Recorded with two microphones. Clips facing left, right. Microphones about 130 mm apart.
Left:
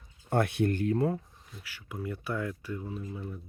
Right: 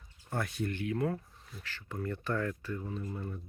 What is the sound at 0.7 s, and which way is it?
Speech, 40° left (ahead or behind).